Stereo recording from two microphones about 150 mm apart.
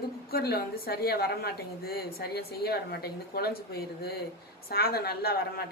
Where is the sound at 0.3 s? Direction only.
90° left.